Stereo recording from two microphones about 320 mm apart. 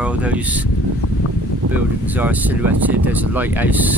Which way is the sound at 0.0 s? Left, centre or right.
Centre.